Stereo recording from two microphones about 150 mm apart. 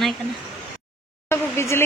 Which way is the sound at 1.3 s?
20° left (ahead or behind).